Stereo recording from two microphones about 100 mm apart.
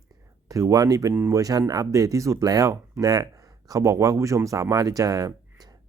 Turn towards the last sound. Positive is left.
turn(degrees=-35)  # may be behind; listen again after turning